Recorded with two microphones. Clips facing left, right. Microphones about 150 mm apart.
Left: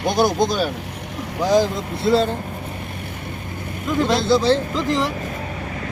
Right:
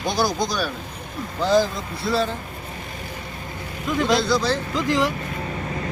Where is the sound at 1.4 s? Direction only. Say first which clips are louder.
Left 2 dB; 15° left (ahead or behind).